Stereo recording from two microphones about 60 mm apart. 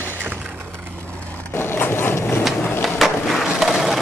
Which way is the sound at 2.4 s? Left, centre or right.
Centre.